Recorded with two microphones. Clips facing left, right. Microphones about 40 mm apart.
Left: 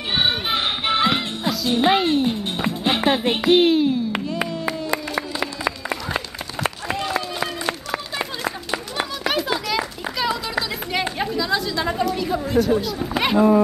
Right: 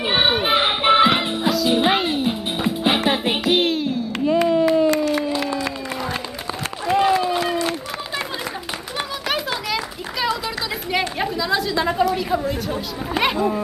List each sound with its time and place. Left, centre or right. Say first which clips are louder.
0.1 s music: right 3 dB; centre
1.5 s music: even; centre
7.2 s run: right 5 dB; centre
8.9 s a sound: even; centre